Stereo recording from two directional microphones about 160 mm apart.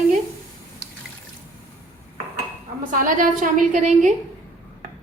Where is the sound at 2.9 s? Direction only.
55° right (ahead or behind).